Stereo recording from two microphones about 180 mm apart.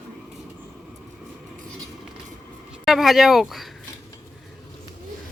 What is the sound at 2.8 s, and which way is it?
Speech, centre (ahead or behind).